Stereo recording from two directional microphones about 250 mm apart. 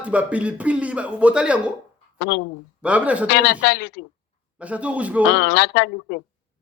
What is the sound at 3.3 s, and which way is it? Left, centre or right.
Speech, left.